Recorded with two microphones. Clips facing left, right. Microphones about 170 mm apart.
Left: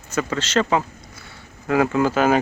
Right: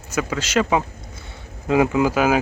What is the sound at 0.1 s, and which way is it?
Speech, 10° right (ahead or behind).